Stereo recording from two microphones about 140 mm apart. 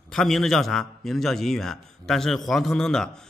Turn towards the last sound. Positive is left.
turn(degrees=5)  # may be behind; listen again after turning